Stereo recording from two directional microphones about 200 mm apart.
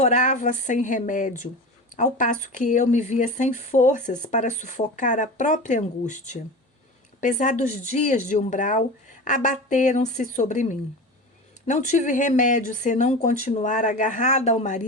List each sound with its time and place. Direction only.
0.0 s speech: 35° left (ahead or behind)